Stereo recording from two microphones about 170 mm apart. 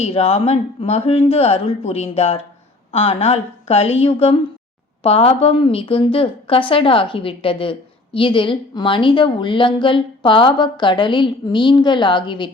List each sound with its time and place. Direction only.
0.0 s a woman's voice: 35° left (ahead or behind)